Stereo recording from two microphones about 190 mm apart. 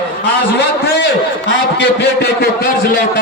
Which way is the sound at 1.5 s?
60° left (ahead or behind).